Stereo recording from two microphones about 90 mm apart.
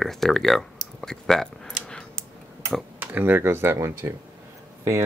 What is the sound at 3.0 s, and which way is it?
Speech, 20° right (ahead or behind).